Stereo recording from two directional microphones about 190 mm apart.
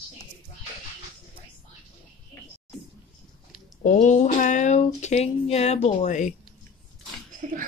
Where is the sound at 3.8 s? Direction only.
40° left (ahead or behind).